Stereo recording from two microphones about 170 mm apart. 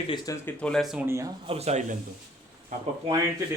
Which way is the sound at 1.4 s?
35° right (ahead or behind).